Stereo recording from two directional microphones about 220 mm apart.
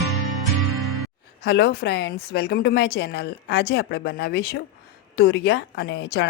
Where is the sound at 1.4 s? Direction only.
45° left (ahead or behind).